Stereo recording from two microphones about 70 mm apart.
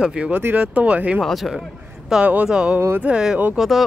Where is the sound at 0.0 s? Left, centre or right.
Centre.